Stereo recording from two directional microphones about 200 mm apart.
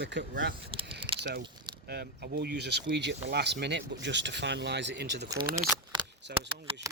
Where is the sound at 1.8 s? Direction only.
55° right (ahead or behind).